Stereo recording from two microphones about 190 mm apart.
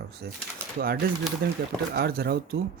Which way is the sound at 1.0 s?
50° right (ahead or behind).